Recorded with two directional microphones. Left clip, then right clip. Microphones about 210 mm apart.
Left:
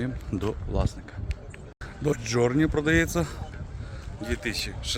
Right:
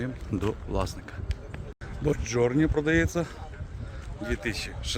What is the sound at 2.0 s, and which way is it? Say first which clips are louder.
A man's voice: left 1 dB; 20° left (ahead or behind).